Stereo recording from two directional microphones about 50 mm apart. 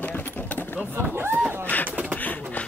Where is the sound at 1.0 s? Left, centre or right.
Right.